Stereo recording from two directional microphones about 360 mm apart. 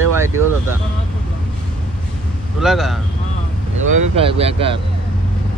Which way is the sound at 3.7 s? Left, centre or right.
Right.